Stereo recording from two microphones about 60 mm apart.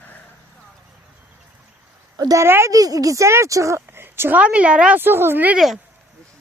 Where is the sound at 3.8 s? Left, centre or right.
Right.